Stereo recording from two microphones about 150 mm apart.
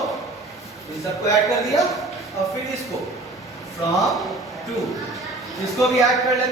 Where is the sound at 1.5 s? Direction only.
Centre (ahead or behind).